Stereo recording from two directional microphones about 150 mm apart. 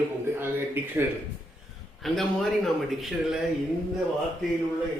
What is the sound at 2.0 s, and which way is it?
A man's voice, centre (ahead or behind).